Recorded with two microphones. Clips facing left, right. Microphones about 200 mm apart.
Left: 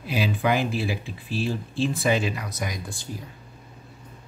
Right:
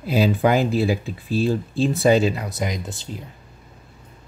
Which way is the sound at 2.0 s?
35° right (ahead or behind).